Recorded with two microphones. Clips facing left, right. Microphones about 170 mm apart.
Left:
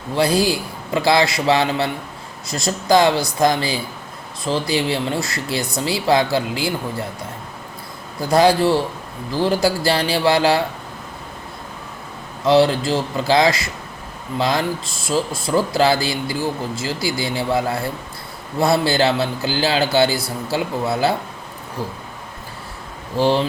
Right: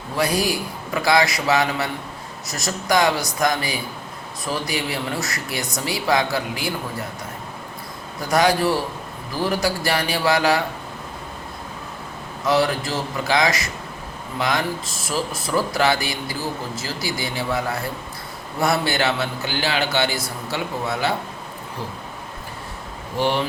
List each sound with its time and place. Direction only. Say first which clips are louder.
0.2 s speech: left 4 dB; 30° left (ahead or behind)
8.3 s speech: left 4 dB; 30° left (ahead or behind)
12.5 s a man's voice: left 5 dB; 25° left (ahead or behind)
23.1 s a man's voice: left 4 dB; 30° left (ahead or behind)